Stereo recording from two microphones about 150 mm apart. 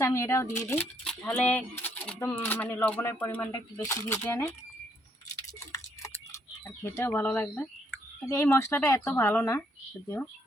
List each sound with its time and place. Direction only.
0.0 s speech: 20° left (ahead or behind)
5.5 s speech: 20° left (ahead or behind)